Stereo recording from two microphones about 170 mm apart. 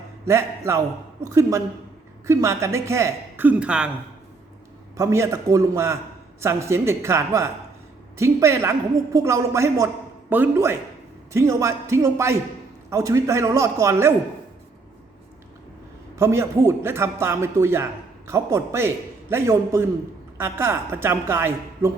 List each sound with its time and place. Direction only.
0.3 s a man's voice: 15° right (ahead or behind)
4.9 s a man's voice: 15° right (ahead or behind)
16.1 s a man's voice: 15° right (ahead or behind)